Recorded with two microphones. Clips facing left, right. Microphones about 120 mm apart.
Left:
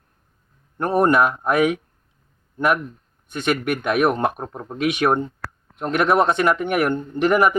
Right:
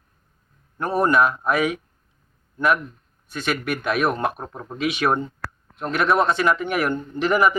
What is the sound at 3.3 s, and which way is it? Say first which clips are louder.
Speech: left 3 dB; 20° left (ahead or behind).